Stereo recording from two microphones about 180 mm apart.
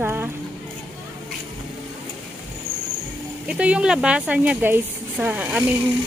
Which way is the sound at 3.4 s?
5° right (ahead or behind).